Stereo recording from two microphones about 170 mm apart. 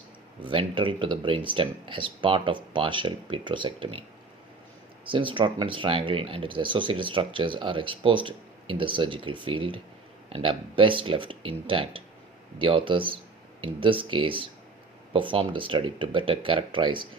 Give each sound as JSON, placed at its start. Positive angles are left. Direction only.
{"t": 0.4, "sound": "speech", "side_deg": -30}
{"t": 5.0, "sound": "speech", "side_deg": -30}